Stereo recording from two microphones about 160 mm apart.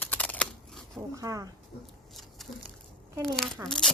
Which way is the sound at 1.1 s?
20° right (ahead or behind).